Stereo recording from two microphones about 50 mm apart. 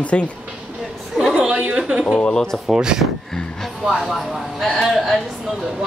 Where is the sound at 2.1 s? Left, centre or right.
Centre.